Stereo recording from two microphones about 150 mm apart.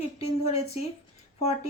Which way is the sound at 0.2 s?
45° left (ahead or behind).